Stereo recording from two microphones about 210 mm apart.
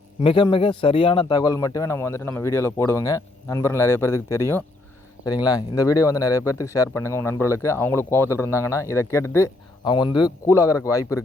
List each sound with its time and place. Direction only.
0.2 s a man's voice: 25° left (ahead or behind)